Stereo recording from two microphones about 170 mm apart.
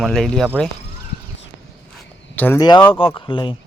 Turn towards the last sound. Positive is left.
turn(degrees=30)  # may be behind; listen again after turning